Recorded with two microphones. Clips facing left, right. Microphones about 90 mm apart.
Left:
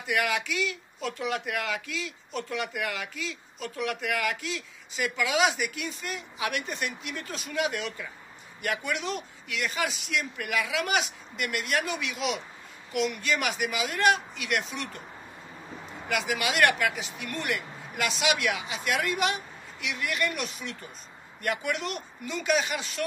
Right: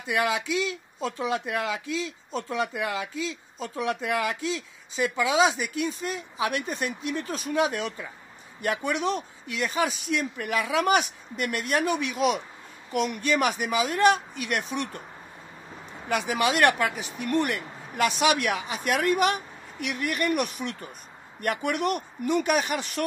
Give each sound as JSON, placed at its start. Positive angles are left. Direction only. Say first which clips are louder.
{"t": 0.0, "sound": "speech", "louder": "right 2 dB", "side_deg": -25}
{"t": 16.1, "sound": "speech", "louder": "right 4 dB", "side_deg": -35}